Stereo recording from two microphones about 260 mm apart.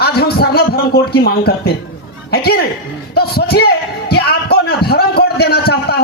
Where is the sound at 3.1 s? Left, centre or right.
Left.